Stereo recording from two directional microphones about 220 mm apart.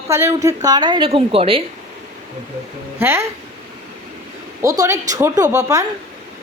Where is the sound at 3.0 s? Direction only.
10° right (ahead or behind).